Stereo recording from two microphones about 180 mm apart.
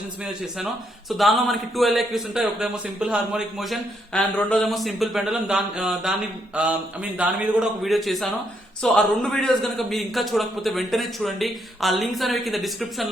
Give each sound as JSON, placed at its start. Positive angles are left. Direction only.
{"t": 1.1, "sound": "speech", "side_deg": 0}